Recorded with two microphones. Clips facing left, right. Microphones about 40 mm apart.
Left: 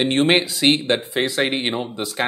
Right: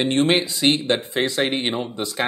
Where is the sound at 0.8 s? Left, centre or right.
Centre.